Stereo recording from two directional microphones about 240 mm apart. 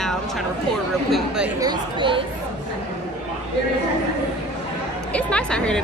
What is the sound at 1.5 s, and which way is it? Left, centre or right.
Speech, centre.